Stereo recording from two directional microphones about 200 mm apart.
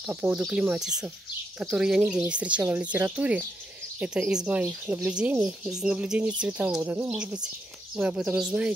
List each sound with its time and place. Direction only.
0.1 s speech: 5° right (ahead or behind)